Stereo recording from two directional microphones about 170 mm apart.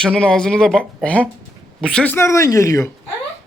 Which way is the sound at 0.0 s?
5° left (ahead or behind).